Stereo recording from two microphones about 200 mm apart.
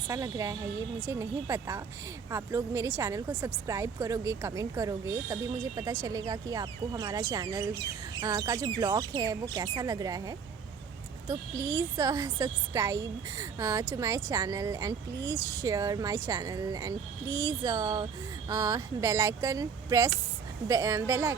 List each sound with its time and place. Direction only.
0.1 s a woman's voice: 15° right (ahead or behind)